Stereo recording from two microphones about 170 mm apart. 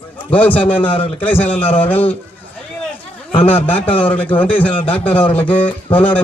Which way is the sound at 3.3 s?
35° left (ahead or behind).